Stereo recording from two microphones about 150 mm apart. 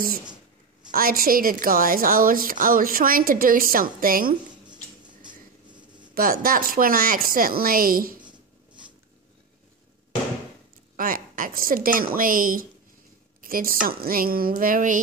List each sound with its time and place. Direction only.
0.9 s a woman's voice: 75° right (ahead or behind)
6.1 s a woman's voice: 75° right (ahead or behind)
11.0 s a woman's voice: 65° right (ahead or behind)